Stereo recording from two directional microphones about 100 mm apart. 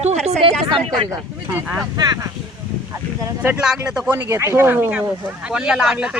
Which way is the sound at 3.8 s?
10° right (ahead or behind).